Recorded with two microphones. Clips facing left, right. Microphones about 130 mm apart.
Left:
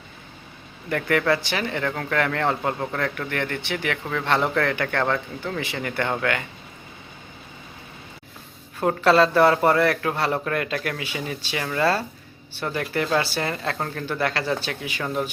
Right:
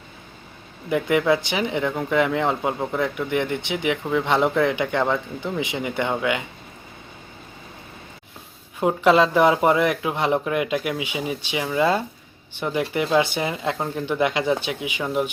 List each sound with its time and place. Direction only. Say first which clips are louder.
0.9 s speech: right 2 dB; 15° right (ahead or behind)
8.8 s speech: right 1 dB; 15° right (ahead or behind)